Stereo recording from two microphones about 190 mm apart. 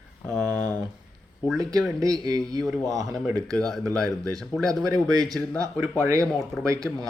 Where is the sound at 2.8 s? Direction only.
20° right (ahead or behind).